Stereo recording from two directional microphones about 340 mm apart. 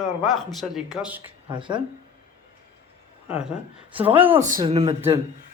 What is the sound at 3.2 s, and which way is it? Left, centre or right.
Speech, centre.